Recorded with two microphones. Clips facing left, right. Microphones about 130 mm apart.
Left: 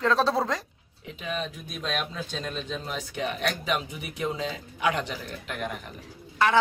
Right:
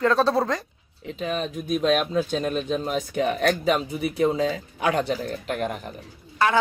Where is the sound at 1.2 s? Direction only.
45° right (ahead or behind).